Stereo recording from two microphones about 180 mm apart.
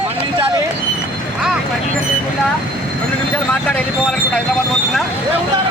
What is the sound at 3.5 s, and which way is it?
Speech, 5° left (ahead or behind).